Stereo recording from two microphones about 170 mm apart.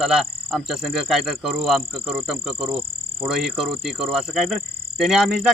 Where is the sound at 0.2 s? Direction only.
Centre (ahead or behind).